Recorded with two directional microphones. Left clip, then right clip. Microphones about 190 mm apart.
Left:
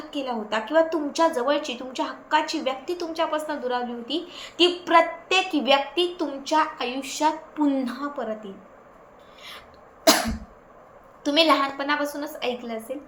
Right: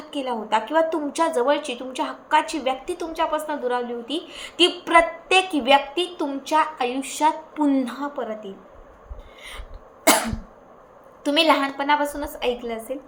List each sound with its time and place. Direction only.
0.1 s a woman's voice: 10° right (ahead or behind)
11.2 s a woman's voice: 15° right (ahead or behind)